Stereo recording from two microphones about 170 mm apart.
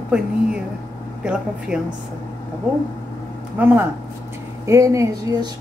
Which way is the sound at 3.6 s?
10° right (ahead or behind).